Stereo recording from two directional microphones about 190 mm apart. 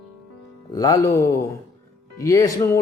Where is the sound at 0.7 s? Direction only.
20° left (ahead or behind).